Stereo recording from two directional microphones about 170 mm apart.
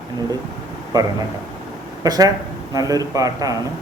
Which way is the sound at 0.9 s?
20° right (ahead or behind).